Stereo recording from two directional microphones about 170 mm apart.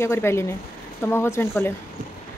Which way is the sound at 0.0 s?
15° left (ahead or behind).